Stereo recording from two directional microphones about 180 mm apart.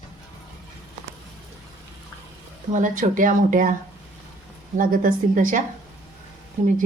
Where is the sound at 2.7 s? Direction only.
45° right (ahead or behind).